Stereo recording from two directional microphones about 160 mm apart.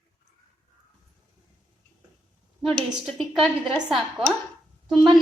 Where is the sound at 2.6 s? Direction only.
5° left (ahead or behind).